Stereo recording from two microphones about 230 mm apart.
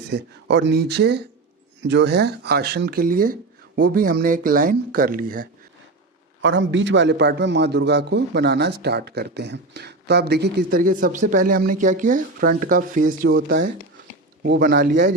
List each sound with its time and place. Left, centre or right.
0.1 s a man's voice: right
6.4 s a man's voice: right
14.4 s a man's voice: right